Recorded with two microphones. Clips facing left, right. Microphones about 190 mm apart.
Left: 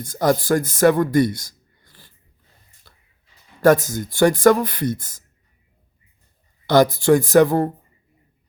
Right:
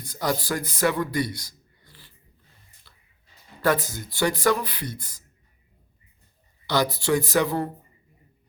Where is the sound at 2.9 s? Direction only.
45° left (ahead or behind).